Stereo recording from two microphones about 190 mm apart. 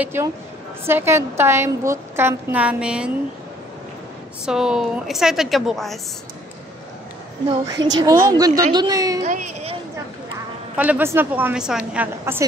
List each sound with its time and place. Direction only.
0.0 s a woman's voice: 10° right (ahead or behind)
4.5 s a woman's voice: 5° right (ahead or behind)
7.6 s a woman's voice: 20° right (ahead or behind)
9.2 s speech: 40° right (ahead or behind)
10.8 s a woman's voice: 10° right (ahead or behind)